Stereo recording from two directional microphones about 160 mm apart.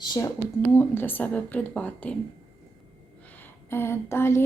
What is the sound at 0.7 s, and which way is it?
A woman's voice, 15° left (ahead or behind).